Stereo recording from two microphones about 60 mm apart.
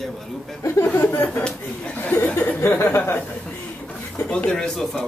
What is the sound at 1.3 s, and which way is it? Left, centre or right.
Speech, centre.